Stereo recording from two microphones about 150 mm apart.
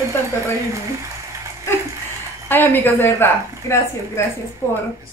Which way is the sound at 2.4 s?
15° left (ahead or behind).